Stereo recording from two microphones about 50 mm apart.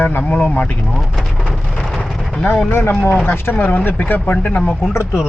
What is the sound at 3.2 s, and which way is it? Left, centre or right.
Speech, left.